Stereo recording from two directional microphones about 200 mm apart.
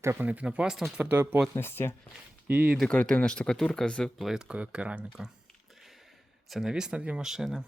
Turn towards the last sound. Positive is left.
turn(degrees=0)  # may be behind; listen again after turning